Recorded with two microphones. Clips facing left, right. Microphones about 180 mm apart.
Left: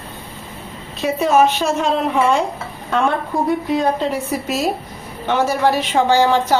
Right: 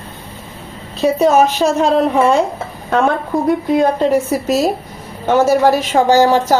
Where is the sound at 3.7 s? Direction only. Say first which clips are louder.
Right 5 dB; 45° right (ahead or behind).